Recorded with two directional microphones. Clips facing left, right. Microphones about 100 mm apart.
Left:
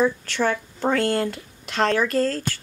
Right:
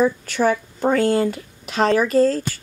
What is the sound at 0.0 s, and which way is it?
Speech, 10° right (ahead or behind).